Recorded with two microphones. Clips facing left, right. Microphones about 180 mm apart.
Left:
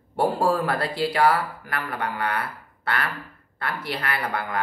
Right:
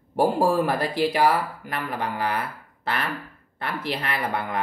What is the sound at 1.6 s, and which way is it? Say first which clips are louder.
Speech: right 1 dB; 20° right (ahead or behind).